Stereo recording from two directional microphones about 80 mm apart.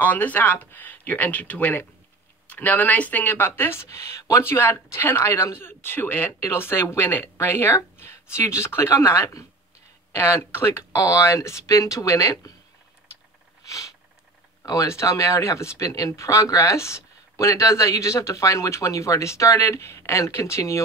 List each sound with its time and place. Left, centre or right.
0.0 s speech: left
13.7 s sniff: left
14.6 s speech: left